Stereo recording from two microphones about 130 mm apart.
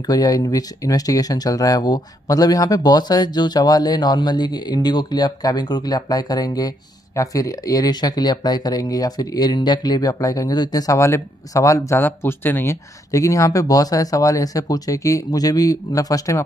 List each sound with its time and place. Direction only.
0.0 s speech: 30° left (ahead or behind)